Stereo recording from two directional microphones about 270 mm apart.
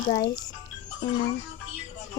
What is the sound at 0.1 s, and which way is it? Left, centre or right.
Speech, centre.